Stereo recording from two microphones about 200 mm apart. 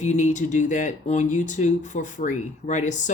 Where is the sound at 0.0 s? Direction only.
35° left (ahead or behind).